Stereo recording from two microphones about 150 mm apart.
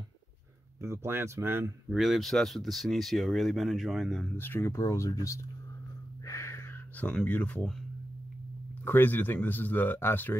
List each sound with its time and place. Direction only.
0.7 s speech: 20° right (ahead or behind)
1.9 s speech: centre (ahead or behind)
4.4 s speech: 15° left (ahead or behind)
6.2 s a sound: 20° left (ahead or behind)
8.8 s speech: 10° left (ahead or behind)